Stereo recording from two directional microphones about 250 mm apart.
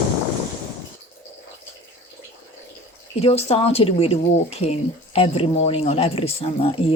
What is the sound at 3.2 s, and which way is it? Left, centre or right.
Speech, left.